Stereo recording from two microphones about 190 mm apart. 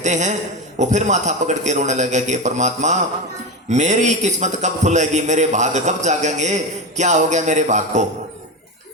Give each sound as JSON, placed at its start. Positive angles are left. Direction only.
{"t": 0.0, "sound": "a man's voice", "side_deg": -40}